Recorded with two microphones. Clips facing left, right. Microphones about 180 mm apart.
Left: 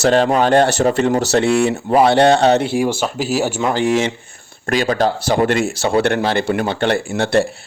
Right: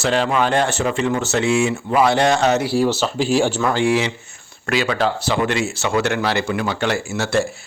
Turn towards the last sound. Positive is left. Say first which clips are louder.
# left 4 dB
turn(degrees=60)  # may be behind; listen again after turning